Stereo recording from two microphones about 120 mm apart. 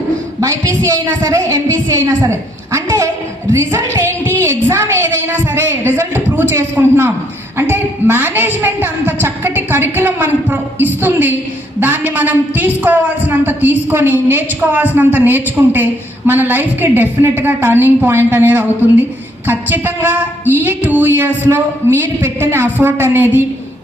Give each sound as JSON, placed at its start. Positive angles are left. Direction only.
{"t": 0.3, "sound": "a woman's voice", "side_deg": -25}